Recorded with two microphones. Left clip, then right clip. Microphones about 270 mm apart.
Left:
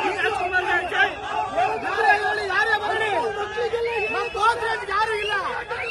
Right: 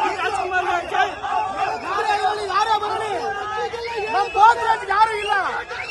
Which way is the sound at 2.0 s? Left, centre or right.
Right.